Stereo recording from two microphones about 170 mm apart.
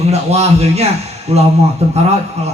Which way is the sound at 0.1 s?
40° right (ahead or behind).